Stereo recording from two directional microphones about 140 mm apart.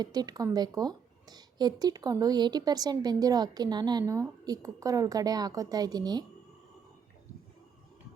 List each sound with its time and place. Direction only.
0.0 s speech: 30° right (ahead or behind)